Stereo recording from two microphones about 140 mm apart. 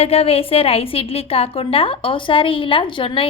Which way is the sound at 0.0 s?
45° left (ahead or behind).